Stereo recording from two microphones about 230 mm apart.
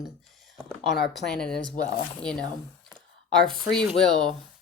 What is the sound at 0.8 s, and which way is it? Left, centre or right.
Speech, centre.